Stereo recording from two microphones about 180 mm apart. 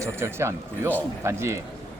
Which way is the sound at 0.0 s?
15° right (ahead or behind).